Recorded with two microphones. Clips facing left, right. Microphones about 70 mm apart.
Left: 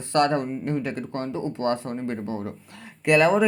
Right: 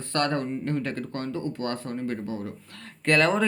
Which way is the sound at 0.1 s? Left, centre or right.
Centre.